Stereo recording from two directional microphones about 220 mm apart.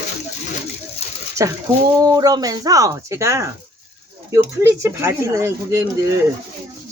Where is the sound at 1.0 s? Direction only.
30° left (ahead or behind).